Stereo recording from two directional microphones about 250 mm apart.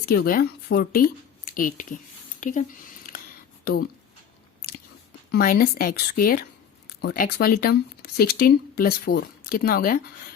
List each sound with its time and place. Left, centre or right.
0.0 s speech: left
5.3 s speech: left